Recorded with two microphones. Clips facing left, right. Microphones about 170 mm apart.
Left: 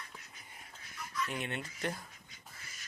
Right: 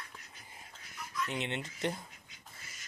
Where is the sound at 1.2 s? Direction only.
20° right (ahead or behind).